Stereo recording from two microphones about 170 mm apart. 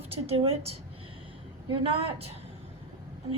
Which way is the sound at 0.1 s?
35° right (ahead or behind).